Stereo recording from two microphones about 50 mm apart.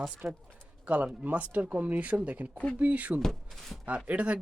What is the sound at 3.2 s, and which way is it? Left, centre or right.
Speech, centre.